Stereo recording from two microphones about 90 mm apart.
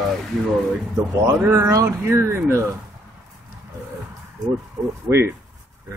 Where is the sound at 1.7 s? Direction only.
30° right (ahead or behind).